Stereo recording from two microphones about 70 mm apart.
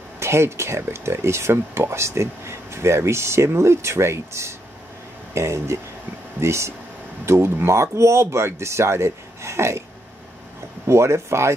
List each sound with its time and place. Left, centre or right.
0.2 s speech: right
10.9 s speech: right